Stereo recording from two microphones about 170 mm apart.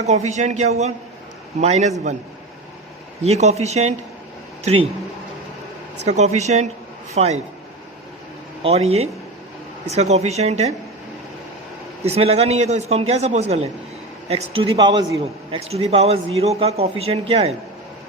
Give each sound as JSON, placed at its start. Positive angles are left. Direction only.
{"t": 0.0, "sound": "speech", "side_deg": -40}
{"t": 3.2, "sound": "speech", "side_deg": -40}
{"t": 6.1, "sound": "speech", "side_deg": -40}
{"t": 8.6, "sound": "speech", "side_deg": -35}
{"t": 12.0, "sound": "speech", "side_deg": -35}
{"t": 15.5, "sound": "speech", "side_deg": -35}